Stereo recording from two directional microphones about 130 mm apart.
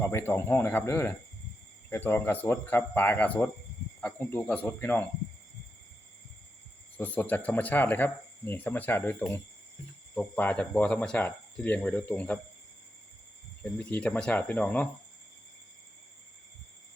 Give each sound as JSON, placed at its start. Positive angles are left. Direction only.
{"t": 0.0, "sound": "speech", "side_deg": 20}
{"t": 6.9, "sound": "speech", "side_deg": 15}
{"t": 13.6, "sound": "speech", "side_deg": 5}